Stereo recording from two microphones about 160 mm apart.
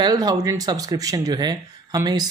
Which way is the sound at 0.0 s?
25° right (ahead or behind).